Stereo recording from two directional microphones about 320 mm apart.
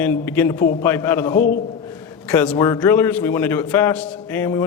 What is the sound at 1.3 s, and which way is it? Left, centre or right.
Speech, left.